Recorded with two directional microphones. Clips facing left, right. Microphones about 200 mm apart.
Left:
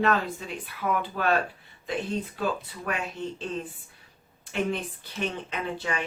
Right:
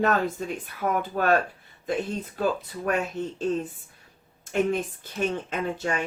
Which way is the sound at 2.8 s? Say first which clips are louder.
Right 5 dB; 45° right (ahead or behind).